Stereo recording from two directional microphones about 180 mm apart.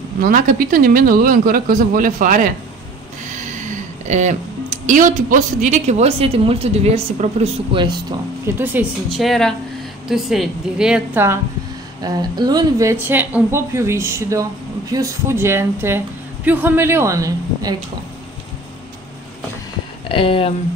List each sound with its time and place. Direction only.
0.2 s speech: 50° right (ahead or behind); by 8.0 s 25° right (ahead or behind)
8.5 s a woman's voice: 10° right (ahead or behind)
12.0 s speech: 20° right (ahead or behind)
20.1 s speech: 30° left (ahead or behind)